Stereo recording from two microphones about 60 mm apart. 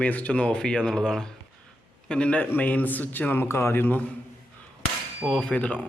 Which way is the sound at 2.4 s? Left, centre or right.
Left.